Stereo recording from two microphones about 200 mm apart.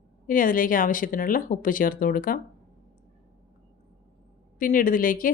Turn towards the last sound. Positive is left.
turn(degrees=45)  # may be behind; listen again after turning